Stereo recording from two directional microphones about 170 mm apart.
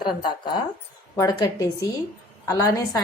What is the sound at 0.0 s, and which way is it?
Speech, 30° left (ahead or behind).